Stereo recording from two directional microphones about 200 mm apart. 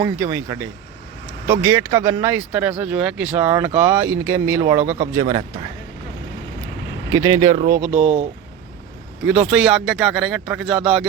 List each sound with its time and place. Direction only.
0.0 s speech: 15° right (ahead or behind)
7.1 s speech: 15° right (ahead or behind)
9.2 s speech: 5° right (ahead or behind)